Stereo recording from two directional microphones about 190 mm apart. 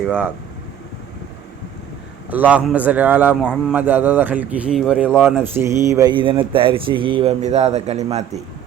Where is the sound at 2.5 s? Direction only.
5° right (ahead or behind).